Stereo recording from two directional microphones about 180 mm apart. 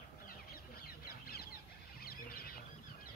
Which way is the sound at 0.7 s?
55° left (ahead or behind).